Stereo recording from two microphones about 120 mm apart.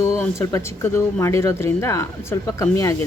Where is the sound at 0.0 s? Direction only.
25° left (ahead or behind).